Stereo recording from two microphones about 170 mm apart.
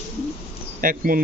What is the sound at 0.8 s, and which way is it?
Speech, 55° right (ahead or behind).